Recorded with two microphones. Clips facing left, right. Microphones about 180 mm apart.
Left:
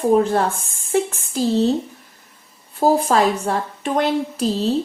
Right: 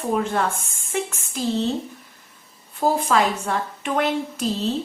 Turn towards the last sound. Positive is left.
turn(degrees=35)  # may be behind; listen again after turning